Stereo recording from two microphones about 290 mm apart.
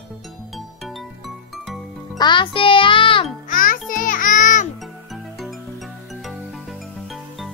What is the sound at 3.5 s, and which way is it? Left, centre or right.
Music, left.